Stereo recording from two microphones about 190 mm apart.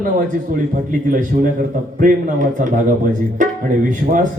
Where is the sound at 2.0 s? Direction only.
45° right (ahead or behind).